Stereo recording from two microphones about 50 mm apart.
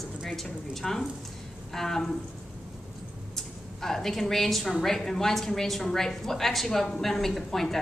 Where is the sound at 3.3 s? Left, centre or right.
Centre.